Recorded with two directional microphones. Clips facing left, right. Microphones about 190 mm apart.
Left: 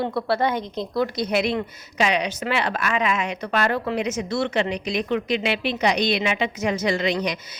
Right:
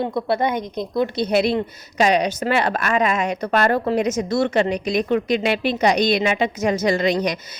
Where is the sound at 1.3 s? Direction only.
35° right (ahead or behind).